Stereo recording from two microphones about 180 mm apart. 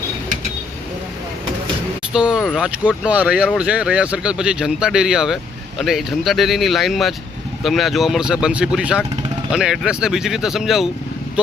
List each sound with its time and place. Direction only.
2.1 s speech: 5° right (ahead or behind)